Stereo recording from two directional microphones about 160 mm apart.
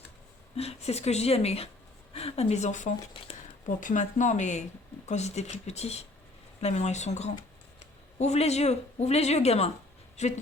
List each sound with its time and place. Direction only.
0.5 s speech: 40° left (ahead or behind)